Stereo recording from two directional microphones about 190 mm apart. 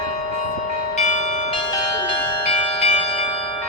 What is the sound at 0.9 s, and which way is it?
Bell, 35° left (ahead or behind).